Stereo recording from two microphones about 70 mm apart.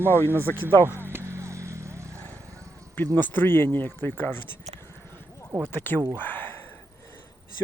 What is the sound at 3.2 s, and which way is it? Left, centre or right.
Speech, left.